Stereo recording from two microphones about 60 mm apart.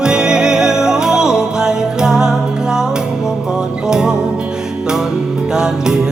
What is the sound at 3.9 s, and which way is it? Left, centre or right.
Music, centre.